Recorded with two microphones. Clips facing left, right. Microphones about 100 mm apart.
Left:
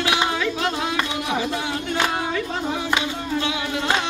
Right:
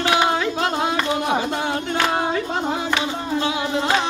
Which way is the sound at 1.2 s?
40° right (ahead or behind).